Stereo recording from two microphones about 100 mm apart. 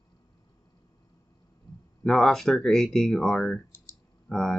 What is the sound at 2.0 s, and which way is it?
Speech, 5° left (ahead or behind).